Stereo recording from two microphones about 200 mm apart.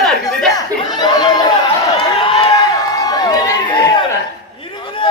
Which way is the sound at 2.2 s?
25° left (ahead or behind).